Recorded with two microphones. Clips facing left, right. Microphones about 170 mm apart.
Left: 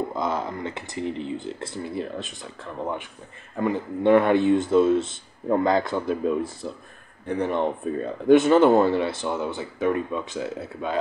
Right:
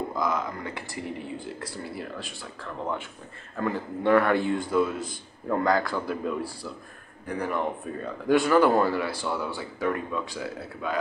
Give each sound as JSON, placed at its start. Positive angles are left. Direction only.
{"t": 0.1, "sound": "speech", "side_deg": 30}